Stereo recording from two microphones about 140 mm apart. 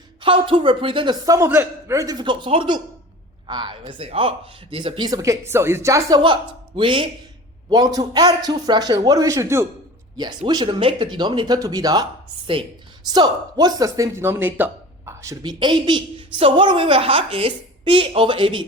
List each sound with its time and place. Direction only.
0.2 s a man's voice: 35° right (ahead or behind); by 9.6 s 20° right (ahead or behind)
10.2 s speech: 30° right (ahead or behind)
13.1 s speech: 30° right (ahead or behind)